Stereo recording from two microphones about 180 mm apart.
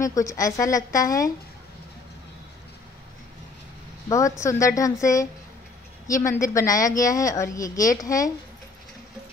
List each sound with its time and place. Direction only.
0.0 s speech: 15° left (ahead or behind)
4.1 s a woman's voice: 15° left (ahead or behind)